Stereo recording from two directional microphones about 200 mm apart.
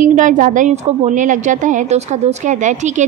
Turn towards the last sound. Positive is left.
turn(degrees=-35)  # may be behind; listen again after turning